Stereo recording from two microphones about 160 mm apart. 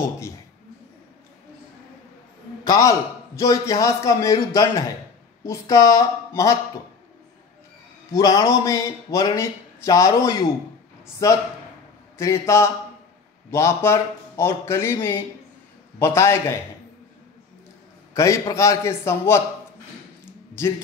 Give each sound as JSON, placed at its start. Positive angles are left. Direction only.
{"t": 2.6, "sound": "speech", "side_deg": 20}
{"t": 8.1, "sound": "speech", "side_deg": 20}
{"t": 18.1, "sound": "speech", "side_deg": 20}